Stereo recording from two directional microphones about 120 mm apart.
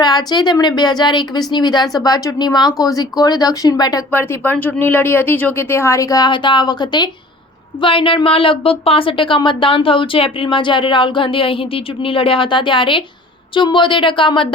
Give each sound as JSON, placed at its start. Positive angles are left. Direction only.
{"t": 0.0, "sound": "speech", "side_deg": 35}
{"t": 4.1, "sound": "a woman's voice", "side_deg": 15}